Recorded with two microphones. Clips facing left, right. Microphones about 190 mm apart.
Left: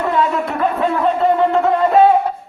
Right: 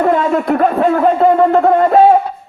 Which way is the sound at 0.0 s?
50° right (ahead or behind).